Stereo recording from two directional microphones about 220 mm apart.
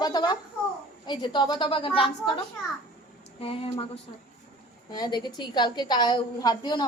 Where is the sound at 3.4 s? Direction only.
25° left (ahead or behind).